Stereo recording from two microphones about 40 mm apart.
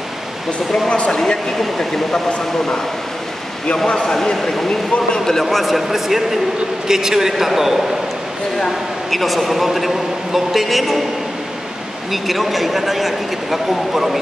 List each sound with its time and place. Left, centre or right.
0.8 s speech: left
1.1 s speech: centre
3.6 s speech: left
5.5 s a man's voice: centre
8.5 s a man's voice: centre
12.1 s a man's voice: centre